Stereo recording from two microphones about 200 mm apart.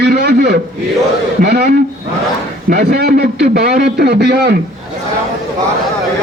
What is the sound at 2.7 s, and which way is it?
A man's voice, 50° right (ahead or behind).